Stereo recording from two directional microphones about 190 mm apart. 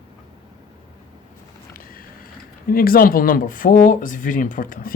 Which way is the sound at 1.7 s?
50° left (ahead or behind).